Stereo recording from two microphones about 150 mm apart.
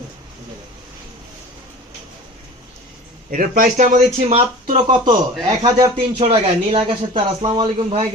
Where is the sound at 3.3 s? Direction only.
65° right (ahead or behind); by 4.4 s 45° right (ahead or behind).